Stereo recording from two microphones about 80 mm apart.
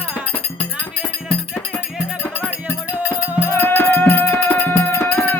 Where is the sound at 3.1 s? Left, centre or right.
Left.